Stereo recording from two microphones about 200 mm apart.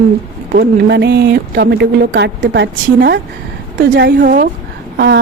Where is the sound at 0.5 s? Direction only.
55° right (ahead or behind).